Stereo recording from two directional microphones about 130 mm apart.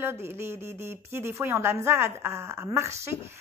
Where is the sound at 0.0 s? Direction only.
20° right (ahead or behind).